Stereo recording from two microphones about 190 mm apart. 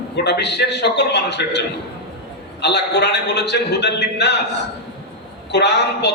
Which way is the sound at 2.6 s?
60° left (ahead or behind).